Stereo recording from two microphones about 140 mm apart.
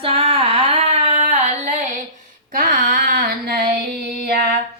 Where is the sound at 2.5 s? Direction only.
80° right.